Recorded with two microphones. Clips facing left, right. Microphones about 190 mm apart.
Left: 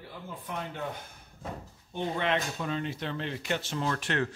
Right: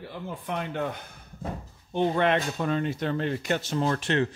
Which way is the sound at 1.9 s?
60° right (ahead or behind).